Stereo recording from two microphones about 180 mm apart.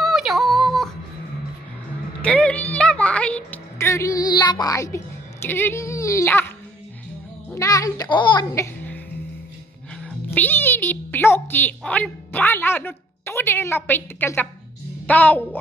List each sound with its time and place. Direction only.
0.0 s music: centre (ahead or behind)
2.2 s a woman's voice: 5° left (ahead or behind)
7.5 s a child's voice: 20° left (ahead or behind)
8.7 s music: 10° left (ahead or behind)
10.0 s a child's voice: 10° left (ahead or behind)